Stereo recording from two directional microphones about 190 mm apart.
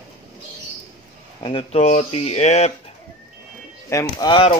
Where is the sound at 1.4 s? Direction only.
30° left (ahead or behind).